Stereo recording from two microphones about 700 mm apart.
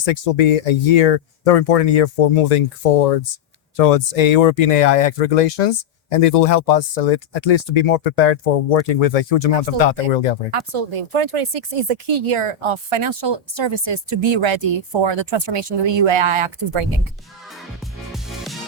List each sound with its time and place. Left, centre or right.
0.0 s speech: left
10.5 s speech: right
18.1 s music: centre